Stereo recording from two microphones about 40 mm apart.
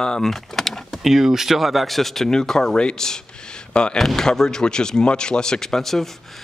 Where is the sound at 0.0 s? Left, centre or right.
Centre.